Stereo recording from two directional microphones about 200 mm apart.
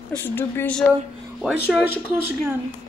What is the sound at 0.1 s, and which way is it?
Speech, 10° left (ahead or behind).